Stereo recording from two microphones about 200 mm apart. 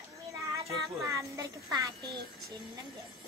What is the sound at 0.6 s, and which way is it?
Child singing, 15° right (ahead or behind).